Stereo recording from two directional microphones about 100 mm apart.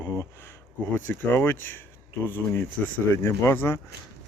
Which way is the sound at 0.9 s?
20° left (ahead or behind).